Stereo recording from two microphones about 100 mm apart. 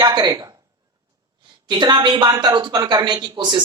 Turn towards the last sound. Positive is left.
turn(degrees=-50)  # may be behind; listen again after turning